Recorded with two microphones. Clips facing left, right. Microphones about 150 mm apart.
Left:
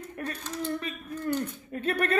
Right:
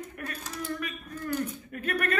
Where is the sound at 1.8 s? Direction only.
30° left (ahead or behind).